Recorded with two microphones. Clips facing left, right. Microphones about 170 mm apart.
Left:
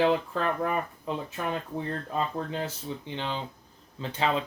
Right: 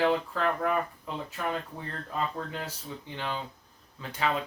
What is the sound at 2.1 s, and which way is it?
Speech, 25° left (ahead or behind).